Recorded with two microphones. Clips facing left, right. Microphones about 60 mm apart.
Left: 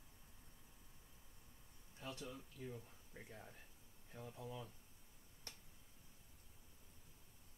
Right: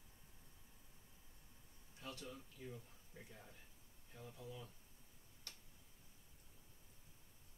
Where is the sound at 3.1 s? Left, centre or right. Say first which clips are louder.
Left 2 dB; left.